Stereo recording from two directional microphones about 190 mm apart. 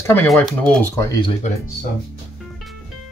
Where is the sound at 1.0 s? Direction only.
20° left (ahead or behind).